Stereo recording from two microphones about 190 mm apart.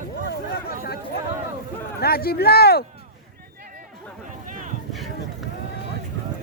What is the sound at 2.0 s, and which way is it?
Speech, 55° left (ahead or behind).